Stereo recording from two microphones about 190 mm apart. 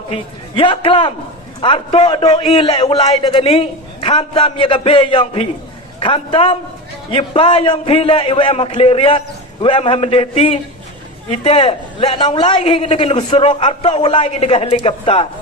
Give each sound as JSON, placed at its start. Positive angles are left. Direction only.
{"t": 0.1, "sound": "a man's voice", "side_deg": 25}